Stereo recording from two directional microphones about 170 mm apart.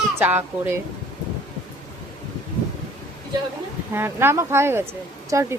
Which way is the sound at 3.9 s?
15° right (ahead or behind).